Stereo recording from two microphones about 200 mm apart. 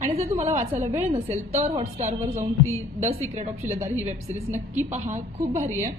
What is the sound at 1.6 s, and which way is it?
Speech, 30° right (ahead or behind).